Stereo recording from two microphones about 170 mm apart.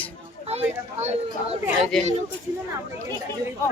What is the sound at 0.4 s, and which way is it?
Speech, 40° right (ahead or behind).